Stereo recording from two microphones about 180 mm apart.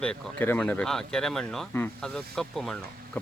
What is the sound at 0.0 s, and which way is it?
Speech, 10° left (ahead or behind).